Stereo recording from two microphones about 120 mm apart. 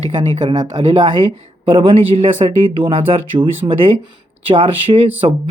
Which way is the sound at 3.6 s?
40° right (ahead or behind).